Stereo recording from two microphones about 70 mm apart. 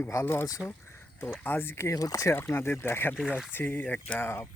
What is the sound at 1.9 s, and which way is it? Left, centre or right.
Speech, left.